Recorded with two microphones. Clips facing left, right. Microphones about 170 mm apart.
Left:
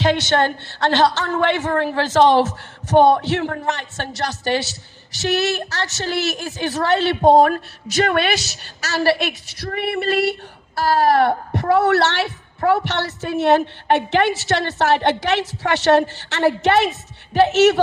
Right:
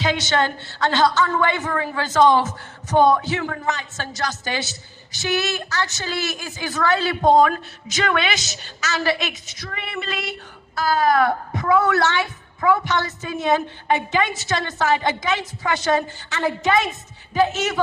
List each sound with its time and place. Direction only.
0.0 s a woman's voice: 60° left (ahead or behind)
7.1 s a man's voice: 30° left (ahead or behind)
7.4 s a woman's voice: 60° left (ahead or behind)
11.1 s a man's voice: 30° left (ahead or behind)
11.7 s a woman's voice: 70° left (ahead or behind)